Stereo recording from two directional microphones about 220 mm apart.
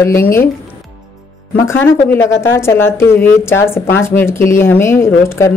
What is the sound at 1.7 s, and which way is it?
A woman's voice, 10° left (ahead or behind).